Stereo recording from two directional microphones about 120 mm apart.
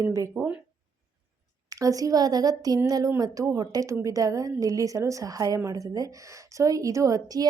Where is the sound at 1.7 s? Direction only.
30° right (ahead or behind).